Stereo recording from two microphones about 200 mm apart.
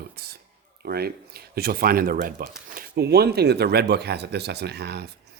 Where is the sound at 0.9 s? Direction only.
50° right (ahead or behind).